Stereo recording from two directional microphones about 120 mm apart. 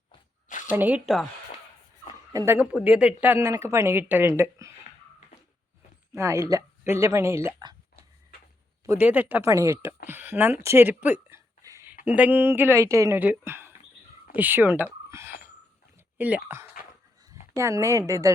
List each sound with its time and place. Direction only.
0.7 s speech: 15° right (ahead or behind)
1.0 s speech: centre (ahead or behind)
2.3 s speech: 25° right (ahead or behind)
2.8 s speech: 10° right (ahead or behind)
6.1 s speech: 25° right (ahead or behind)
8.9 s speech: 15° right (ahead or behind)
9.5 s speech: 25° right (ahead or behind)
11.6 s a sound: 25° right (ahead or behind)
12.0 s speech: 15° right (ahead or behind)
16.1 s speech: 15° right (ahead or behind)